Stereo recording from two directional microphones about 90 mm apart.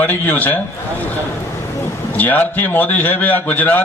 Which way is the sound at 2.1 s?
20° left (ahead or behind).